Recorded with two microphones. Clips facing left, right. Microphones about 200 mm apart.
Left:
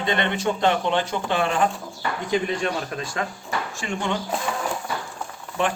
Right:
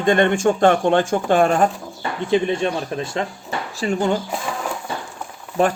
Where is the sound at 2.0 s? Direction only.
25° right (ahead or behind).